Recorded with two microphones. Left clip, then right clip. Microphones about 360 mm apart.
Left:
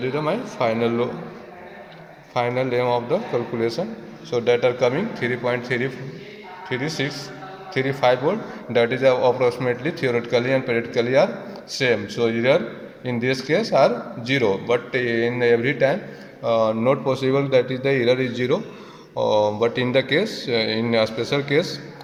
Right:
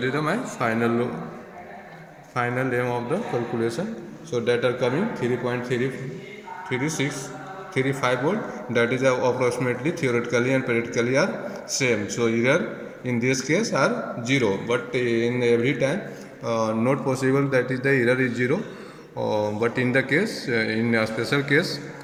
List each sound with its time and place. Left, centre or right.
0.3 s a man's voice: centre
2.3 s a man's voice: centre
4.3 s a man's voice: centre